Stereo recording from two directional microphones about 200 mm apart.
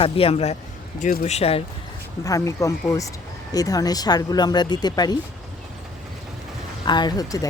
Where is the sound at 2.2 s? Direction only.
15° left (ahead or behind).